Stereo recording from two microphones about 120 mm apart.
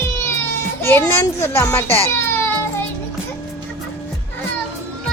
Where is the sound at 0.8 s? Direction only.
20° left (ahead or behind).